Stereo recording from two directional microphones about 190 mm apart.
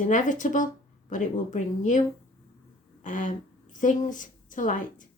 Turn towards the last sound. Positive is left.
turn(degrees=45)  # may be behind; listen again after turning